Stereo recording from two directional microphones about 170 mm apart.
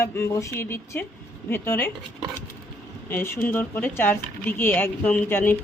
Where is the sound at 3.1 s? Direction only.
10° left (ahead or behind).